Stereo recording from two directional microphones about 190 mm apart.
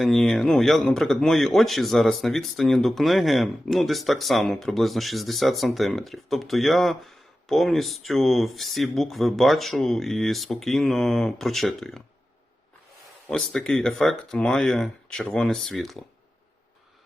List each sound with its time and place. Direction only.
0.0 s speech: centre (ahead or behind)
13.2 s speech: 5° left (ahead or behind)